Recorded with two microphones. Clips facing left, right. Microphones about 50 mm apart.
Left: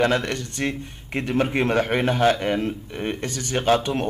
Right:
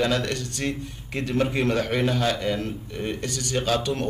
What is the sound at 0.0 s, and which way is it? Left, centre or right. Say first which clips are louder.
A man's voice: left 3 dB; left.